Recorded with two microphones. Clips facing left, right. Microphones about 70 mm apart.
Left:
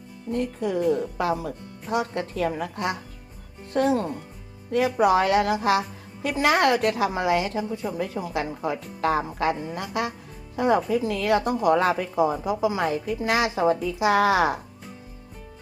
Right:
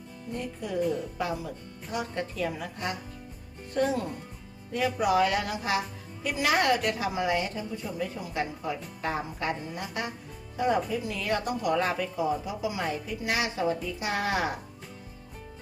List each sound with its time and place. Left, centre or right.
0.3 s a woman's voice: left